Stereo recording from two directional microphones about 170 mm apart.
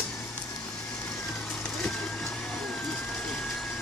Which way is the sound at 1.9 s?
Centre (ahead or behind).